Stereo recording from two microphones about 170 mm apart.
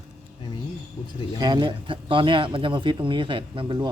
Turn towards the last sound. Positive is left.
turn(degrees=-30)  # may be behind; listen again after turning